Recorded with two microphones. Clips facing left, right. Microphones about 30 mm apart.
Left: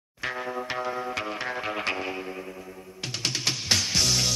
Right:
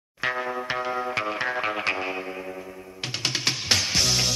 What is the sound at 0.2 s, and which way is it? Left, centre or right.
Music, centre.